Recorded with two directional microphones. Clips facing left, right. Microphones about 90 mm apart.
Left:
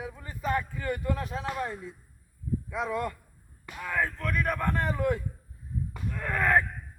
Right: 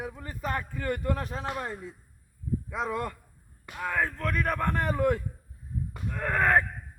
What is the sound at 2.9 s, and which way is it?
Speech, 40° right (ahead or behind).